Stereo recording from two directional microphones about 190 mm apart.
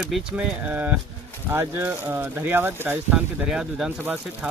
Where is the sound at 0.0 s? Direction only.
5° right (ahead or behind).